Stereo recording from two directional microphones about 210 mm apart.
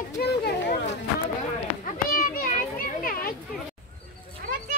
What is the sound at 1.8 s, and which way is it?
Children playing, 40° left (ahead or behind).